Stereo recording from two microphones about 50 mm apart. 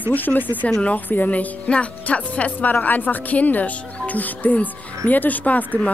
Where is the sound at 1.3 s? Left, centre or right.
Left.